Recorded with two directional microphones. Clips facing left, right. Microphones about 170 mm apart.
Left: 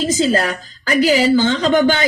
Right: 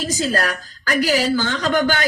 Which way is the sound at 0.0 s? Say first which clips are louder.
Left 5 dB; 20° left (ahead or behind).